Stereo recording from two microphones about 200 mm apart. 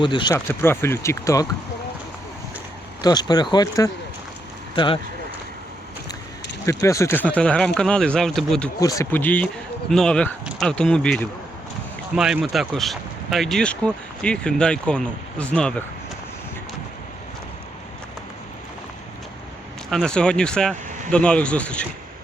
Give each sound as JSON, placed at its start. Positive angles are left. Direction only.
{"t": 0.0, "sound": "speech", "side_deg": 25}
{"t": 3.0, "sound": "speech", "side_deg": 20}
{"t": 6.8, "sound": "speech", "side_deg": 15}
{"t": 8.8, "sound": "speech", "side_deg": 15}
{"t": 19.9, "sound": "speech", "side_deg": 5}